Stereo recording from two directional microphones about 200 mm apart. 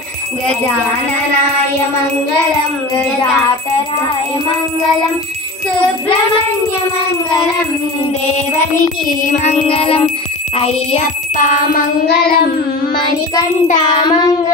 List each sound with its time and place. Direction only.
9.3 s child singing: 35° left (ahead or behind)
12.9 s child singing: 20° left (ahead or behind)